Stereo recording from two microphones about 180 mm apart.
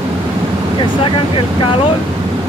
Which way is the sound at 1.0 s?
30° left (ahead or behind).